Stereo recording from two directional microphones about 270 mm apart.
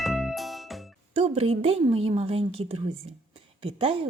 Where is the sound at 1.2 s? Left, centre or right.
Right.